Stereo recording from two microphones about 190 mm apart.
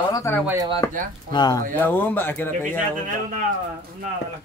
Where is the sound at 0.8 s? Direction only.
20° left (ahead or behind).